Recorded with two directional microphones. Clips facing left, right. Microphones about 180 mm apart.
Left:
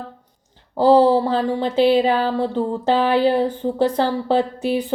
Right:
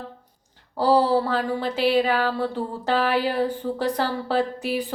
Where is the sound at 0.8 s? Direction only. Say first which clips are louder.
Left 6 dB; 25° left (ahead or behind).